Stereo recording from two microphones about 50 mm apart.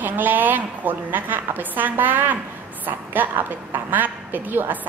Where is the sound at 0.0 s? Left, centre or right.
Right.